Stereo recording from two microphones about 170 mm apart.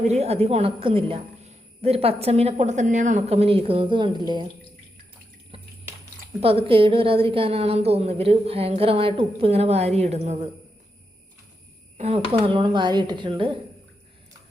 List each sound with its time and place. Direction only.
0.1 s a woman's voice: 40° right (ahead or behind)
6.4 s a woman's voice: 35° right (ahead or behind)
11.9 s speech: 40° right (ahead or behind)